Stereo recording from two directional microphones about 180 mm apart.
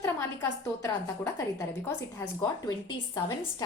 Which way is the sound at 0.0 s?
15° left (ahead or behind).